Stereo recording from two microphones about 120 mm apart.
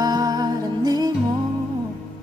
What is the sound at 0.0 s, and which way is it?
Music, 35° right (ahead or behind).